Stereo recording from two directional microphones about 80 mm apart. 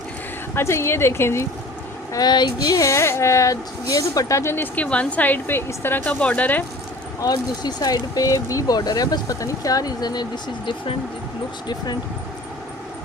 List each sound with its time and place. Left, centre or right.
0.5 s speech: left
2.1 s speech: left
2.9 s speech: left
6.1 s speech: centre
7.2 s speech: left